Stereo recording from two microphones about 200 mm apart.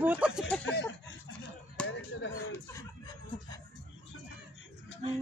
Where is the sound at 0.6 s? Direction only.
55° left (ahead or behind).